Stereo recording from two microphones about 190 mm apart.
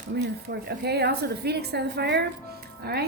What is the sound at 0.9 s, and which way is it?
A woman's voice, 60° right (ahead or behind).